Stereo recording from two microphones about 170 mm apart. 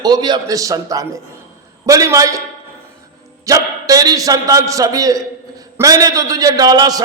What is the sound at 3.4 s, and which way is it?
A man's voice, 20° right (ahead or behind).